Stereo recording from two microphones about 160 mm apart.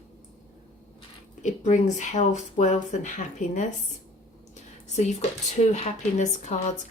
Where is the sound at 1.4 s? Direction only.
50° left (ahead or behind).